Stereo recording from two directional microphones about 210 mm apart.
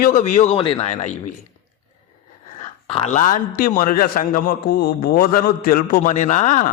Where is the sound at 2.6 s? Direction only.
30° left (ahead or behind).